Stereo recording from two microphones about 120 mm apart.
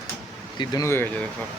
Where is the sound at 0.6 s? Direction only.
35° left (ahead or behind).